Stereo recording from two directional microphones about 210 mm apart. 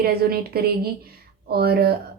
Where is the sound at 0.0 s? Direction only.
45° right (ahead or behind).